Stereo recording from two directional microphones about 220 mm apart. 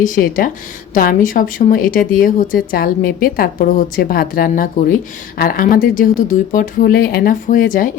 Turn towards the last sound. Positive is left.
turn(degrees=40)  # may be behind; listen again after turning